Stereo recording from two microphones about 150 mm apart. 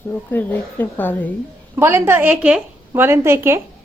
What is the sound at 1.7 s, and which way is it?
A woman's voice, 15° right (ahead or behind).